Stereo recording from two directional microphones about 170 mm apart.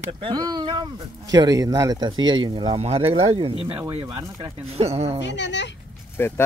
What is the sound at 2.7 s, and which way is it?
Speech, 35° right (ahead or behind).